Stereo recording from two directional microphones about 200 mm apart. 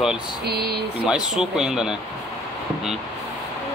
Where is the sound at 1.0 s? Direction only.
5° right (ahead or behind).